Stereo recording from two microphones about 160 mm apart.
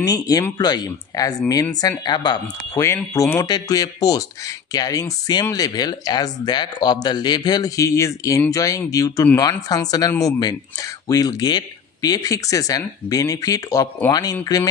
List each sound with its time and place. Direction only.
0.0 s speech: 25° left (ahead or behind)